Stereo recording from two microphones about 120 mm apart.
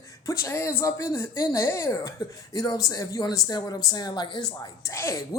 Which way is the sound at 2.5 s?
30° left (ahead or behind).